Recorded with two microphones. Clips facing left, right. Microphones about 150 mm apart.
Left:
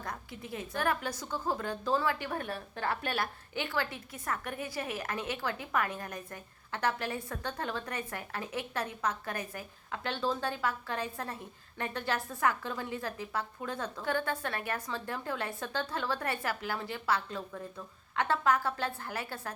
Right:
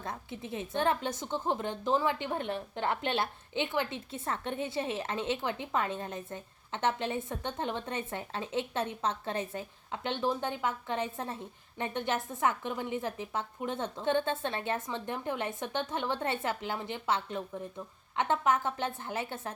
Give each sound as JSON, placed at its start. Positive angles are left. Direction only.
{"t": 0.0, "sound": "a woman's voice", "side_deg": -25}